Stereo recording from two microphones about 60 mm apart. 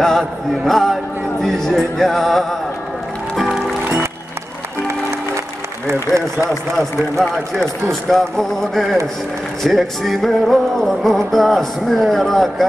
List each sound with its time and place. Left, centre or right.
0.0 s music: centre
6.8 s music: centre